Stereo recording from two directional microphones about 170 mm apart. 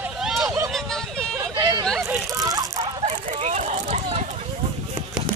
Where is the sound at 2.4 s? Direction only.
20° right (ahead or behind).